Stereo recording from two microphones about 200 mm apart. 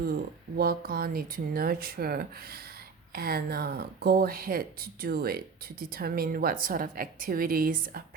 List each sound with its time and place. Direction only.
0.5 s speech: 50° right (ahead or behind)